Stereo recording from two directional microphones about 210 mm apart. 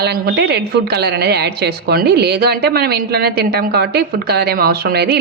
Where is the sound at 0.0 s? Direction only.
50° right (ahead or behind).